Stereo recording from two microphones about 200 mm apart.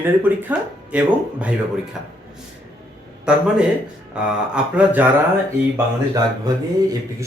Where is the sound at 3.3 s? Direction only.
5° right (ahead or behind).